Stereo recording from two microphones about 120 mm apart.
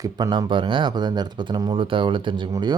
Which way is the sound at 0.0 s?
35° right (ahead or behind).